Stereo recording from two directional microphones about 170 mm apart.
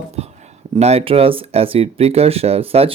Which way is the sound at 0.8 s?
40° right (ahead or behind).